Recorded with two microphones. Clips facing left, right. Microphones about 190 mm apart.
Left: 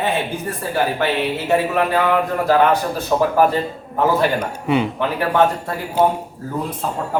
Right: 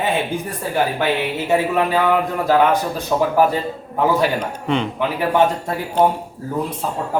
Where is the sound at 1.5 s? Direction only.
15° right (ahead or behind).